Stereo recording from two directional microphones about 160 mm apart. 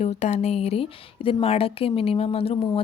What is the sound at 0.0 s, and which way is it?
Speech, 45° left (ahead or behind).